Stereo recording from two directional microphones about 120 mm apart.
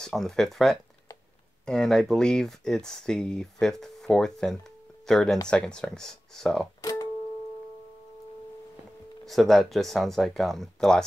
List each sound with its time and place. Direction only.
0.0 s speech: 5° left (ahead or behind)
6.8 s music: 30° left (ahead or behind)
9.2 s speech: centre (ahead or behind)